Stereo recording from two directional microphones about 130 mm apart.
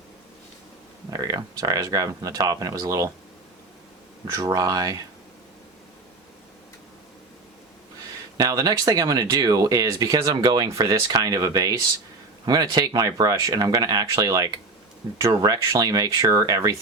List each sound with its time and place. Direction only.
1.1 s speech: 30° right (ahead or behind)
4.3 s speech: 25° right (ahead or behind)
8.4 s speech: 30° right (ahead or behind)